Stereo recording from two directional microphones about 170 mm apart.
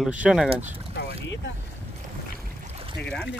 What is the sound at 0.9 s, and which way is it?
Boat, 70° left (ahead or behind).